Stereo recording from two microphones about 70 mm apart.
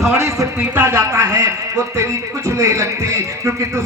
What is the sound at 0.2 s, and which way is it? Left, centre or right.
Speech, right.